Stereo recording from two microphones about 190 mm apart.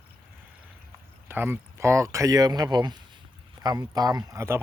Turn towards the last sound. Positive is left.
turn(degrees=-15)  # may be behind; listen again after turning